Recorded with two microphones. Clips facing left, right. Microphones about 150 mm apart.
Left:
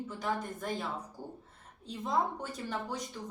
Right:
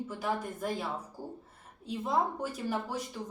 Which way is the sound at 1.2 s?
35° right (ahead or behind).